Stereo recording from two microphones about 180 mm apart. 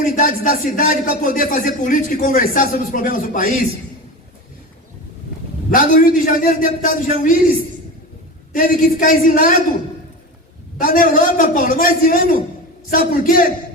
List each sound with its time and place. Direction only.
0.0 s speech: 50° left (ahead or behind)
5.7 s speech: 50° left (ahead or behind)
8.5 s speech: 50° left (ahead or behind)
10.8 s speech: 50° left (ahead or behind)